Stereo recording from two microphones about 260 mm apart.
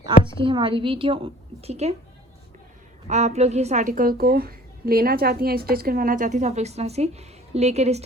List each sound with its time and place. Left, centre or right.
0.0 s a woman's voice: centre
3.1 s a woman's voice: right